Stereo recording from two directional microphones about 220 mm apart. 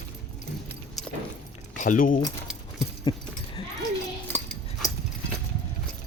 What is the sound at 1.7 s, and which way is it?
Speech, 35° left (ahead or behind).